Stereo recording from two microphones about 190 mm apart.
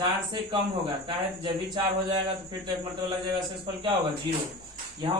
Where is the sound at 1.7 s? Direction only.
25° right (ahead or behind).